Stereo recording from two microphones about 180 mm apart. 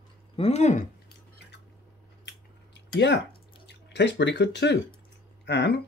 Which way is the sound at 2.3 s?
75° left (ahead or behind).